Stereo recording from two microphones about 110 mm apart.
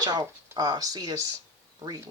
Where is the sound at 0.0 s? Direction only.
40° right (ahead or behind).